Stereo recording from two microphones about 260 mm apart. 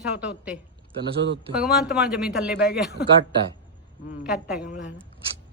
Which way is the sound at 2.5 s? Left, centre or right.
Left.